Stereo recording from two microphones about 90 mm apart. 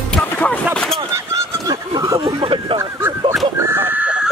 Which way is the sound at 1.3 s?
40° right (ahead or behind).